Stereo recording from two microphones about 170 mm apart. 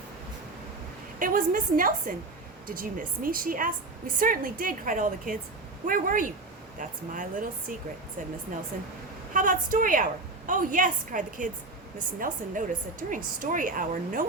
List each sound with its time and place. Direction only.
1.2 s a woman's voice: 55° right (ahead or behind)
9.3 s a woman's voice: 50° right (ahead or behind)